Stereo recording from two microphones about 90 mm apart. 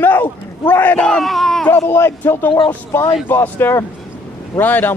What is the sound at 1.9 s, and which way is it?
Speech, 25° left (ahead or behind).